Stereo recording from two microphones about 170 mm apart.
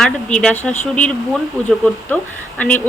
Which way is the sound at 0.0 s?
5° left (ahead or behind).